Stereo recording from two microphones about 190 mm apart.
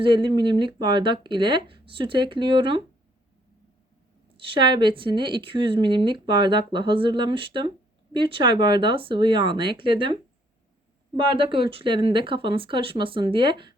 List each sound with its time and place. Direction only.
0.0 s speech: 25° right (ahead or behind)
4.4 s speech: 25° right (ahead or behind)